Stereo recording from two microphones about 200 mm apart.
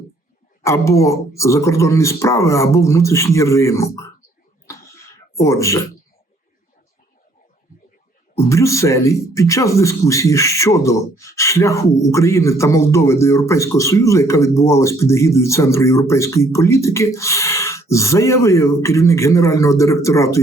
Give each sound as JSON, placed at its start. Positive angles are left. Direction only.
{"t": 0.6, "sound": "a man's voice", "side_deg": 15}
{"t": 4.7, "sound": "a sound", "side_deg": 15}
{"t": 8.4, "sound": "a man's voice", "side_deg": 15}